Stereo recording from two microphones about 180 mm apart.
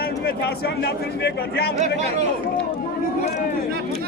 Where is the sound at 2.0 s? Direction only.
40° right (ahead or behind).